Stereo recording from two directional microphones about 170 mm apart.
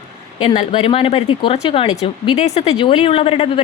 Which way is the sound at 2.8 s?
30° left (ahead or behind).